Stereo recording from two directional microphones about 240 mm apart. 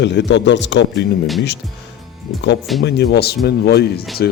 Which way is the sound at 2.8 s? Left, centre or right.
Left.